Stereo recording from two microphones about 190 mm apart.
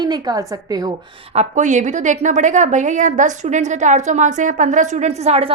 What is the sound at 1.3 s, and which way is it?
A woman's voice, 35° right (ahead or behind).